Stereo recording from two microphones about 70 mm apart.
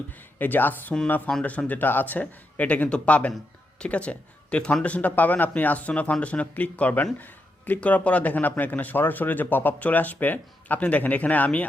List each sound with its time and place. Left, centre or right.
0.3 s speech: left